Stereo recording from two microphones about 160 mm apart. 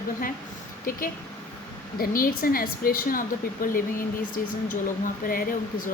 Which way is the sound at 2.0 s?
65° left (ahead or behind).